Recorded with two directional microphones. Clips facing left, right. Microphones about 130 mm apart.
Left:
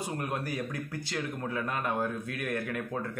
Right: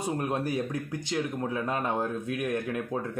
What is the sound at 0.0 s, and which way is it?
A man's voice, 25° right (ahead or behind).